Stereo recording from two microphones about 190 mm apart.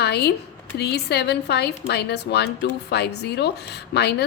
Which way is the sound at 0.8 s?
60° left (ahead or behind).